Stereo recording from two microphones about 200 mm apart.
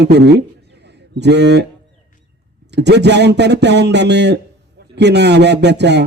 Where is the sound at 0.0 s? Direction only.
55° right (ahead or behind).